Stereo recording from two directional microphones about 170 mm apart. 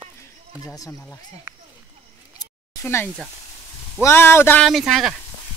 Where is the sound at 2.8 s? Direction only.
15° left (ahead or behind).